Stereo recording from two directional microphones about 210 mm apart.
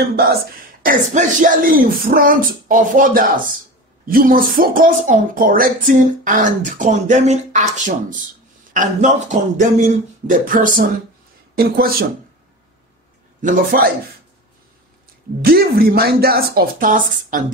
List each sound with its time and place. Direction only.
0.8 s speech: 40° right (ahead or behind)
8.7 s speech: 35° right (ahead or behind)
13.4 s speech: 40° right (ahead or behind)
15.4 s a woman's voice: 45° right (ahead or behind)